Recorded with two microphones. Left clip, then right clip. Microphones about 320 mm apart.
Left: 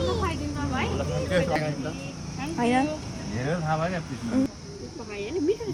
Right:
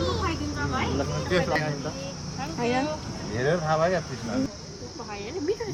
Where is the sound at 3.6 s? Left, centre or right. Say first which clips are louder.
Right 3 dB; right.